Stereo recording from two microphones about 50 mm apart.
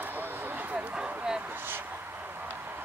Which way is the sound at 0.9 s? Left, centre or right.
Centre.